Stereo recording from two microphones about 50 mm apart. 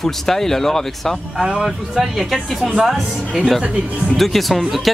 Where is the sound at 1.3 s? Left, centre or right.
Centre.